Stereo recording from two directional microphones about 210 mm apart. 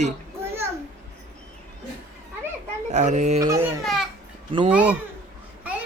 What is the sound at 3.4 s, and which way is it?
Speech, 15° right (ahead or behind).